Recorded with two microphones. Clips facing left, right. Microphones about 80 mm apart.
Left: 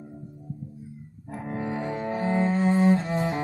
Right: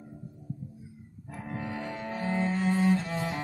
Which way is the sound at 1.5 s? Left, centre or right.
Left.